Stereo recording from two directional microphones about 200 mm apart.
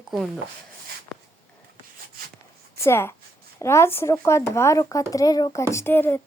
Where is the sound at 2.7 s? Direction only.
10° left (ahead or behind).